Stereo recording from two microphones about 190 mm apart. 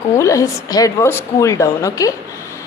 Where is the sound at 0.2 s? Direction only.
15° left (ahead or behind).